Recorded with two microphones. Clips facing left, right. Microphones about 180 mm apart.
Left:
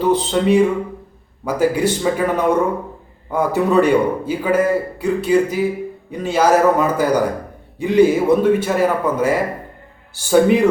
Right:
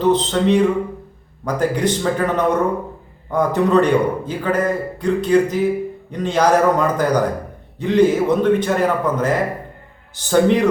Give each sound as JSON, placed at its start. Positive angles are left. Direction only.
{"t": 0.0, "sound": "a man's voice", "side_deg": 10}